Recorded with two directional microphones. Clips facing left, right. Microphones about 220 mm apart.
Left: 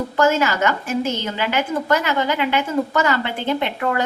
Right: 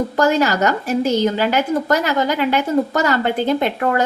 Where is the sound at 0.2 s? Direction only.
40° right (ahead or behind).